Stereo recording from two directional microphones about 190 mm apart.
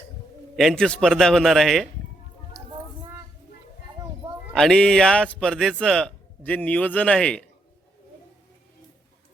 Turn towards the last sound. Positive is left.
turn(degrees=5)  # may be behind; listen again after turning